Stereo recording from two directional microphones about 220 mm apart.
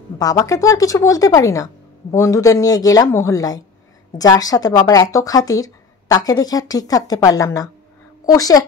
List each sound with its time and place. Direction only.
0.2 s speech: 15° left (ahead or behind)